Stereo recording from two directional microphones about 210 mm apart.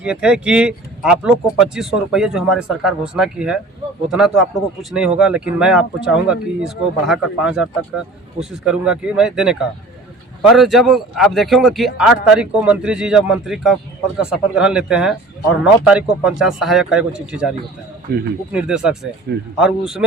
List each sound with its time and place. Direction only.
0.0 s speech: 5° right (ahead or behind)
18.1 s speech: 50° right (ahead or behind)
18.5 s speech: 5° right (ahead or behind)